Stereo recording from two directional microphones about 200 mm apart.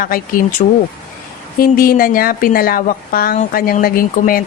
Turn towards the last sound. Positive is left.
turn(degrees=45)  # may be behind; listen again after turning